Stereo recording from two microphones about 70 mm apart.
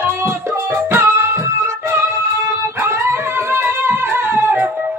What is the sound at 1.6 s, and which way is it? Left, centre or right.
Music, right.